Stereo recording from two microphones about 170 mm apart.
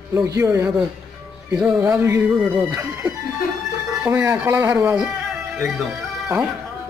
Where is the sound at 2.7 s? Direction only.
15° right (ahead or behind).